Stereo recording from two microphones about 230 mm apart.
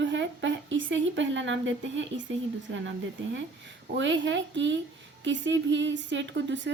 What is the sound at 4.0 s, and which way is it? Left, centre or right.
Speech, right.